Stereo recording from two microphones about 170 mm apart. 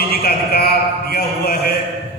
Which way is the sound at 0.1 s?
65° left (ahead or behind).